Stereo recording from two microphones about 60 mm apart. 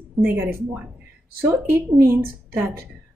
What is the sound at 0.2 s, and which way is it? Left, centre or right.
Speech, right.